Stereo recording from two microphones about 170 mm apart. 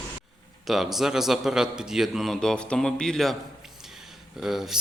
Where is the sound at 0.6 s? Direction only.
Centre (ahead or behind).